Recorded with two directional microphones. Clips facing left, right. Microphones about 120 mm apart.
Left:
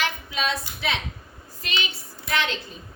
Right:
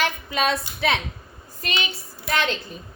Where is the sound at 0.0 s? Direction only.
50° right (ahead or behind).